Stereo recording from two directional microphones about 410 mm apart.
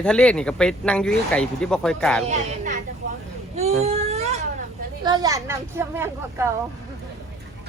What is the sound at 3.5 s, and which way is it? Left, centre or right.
Baby cry, centre.